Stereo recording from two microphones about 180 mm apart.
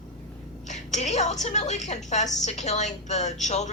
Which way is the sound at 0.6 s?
40° left (ahead or behind).